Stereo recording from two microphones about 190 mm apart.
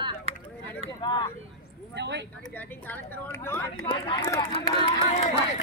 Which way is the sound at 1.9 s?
65° right (ahead or behind).